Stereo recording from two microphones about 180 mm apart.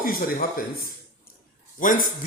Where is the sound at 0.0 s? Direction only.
55° left (ahead or behind).